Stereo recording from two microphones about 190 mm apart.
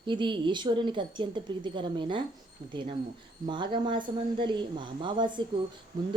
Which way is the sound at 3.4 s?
25° right (ahead or behind).